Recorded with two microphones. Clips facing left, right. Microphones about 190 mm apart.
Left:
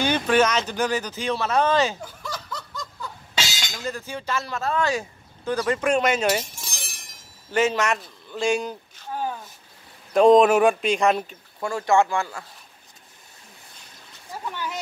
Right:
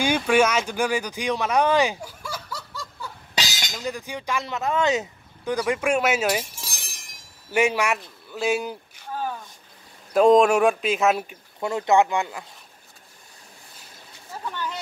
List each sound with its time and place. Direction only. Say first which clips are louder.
0.0 s a man's voice: even; 10° right (ahead or behind)
10.1 s speech: left 1 dB; centre (ahead or behind)
11.6 s speech: right 1 dB; 20° right (ahead or behind)
14.3 s a sound: even; 10° left (ahead or behind)